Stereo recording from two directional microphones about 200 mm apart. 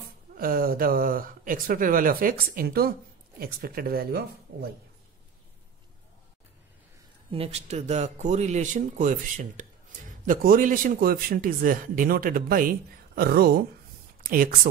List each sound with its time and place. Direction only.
0.4 s a man's voice: 45° right (ahead or behind)
7.2 s a man's voice: 30° right (ahead or behind); by 14.7 s 45° right (ahead or behind)